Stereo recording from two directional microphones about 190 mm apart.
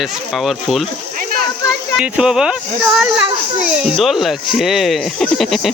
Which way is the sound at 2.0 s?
5° right (ahead or behind).